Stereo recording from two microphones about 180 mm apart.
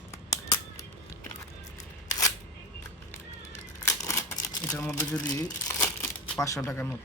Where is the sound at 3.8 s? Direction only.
15° left (ahead or behind).